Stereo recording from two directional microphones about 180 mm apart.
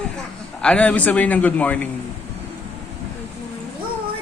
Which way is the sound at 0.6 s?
5° left (ahead or behind).